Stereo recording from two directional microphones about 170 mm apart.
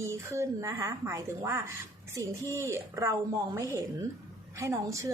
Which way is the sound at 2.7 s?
15° right (ahead or behind).